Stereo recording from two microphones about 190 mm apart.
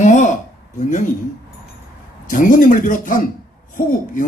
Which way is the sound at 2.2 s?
45° left (ahead or behind).